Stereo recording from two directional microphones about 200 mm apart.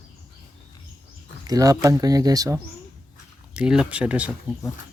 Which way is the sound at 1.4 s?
20° right (ahead or behind).